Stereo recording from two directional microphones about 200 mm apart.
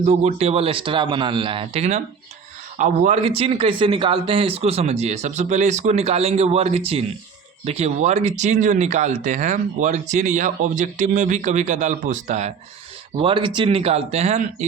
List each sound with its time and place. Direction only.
0.0 s a man's voice: 35° right (ahead or behind)
13.1 s a man's voice: 25° right (ahead or behind)